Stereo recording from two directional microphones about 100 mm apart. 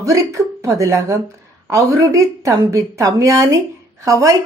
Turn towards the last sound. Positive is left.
turn(degrees=-30)  # may be behind; listen again after turning